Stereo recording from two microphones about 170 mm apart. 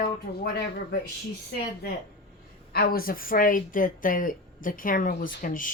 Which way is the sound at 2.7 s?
60° left (ahead or behind).